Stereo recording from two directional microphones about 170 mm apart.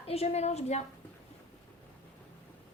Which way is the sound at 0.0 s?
35° left (ahead or behind).